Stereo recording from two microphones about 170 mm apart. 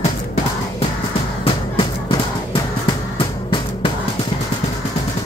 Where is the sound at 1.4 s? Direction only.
30° left (ahead or behind).